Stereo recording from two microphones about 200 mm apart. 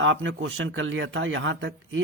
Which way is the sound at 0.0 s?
70° right (ahead or behind).